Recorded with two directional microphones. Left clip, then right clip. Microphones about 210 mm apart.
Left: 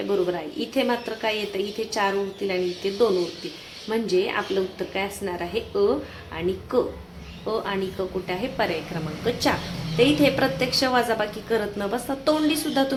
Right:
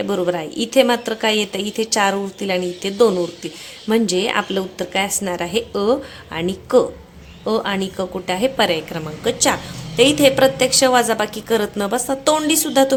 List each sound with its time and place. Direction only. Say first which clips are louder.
0.1 s a woman's voice: right 1 dB; 50° right (ahead or behind)
9.2 s a woman's voice: right 6 dB; 35° right (ahead or behind)